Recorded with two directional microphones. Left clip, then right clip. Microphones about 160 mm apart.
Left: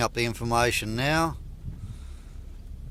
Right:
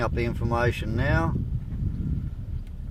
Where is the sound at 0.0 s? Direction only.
35° left (ahead or behind).